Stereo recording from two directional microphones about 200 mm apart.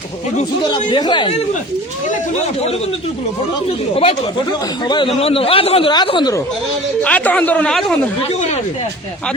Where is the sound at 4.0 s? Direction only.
30° left (ahead or behind).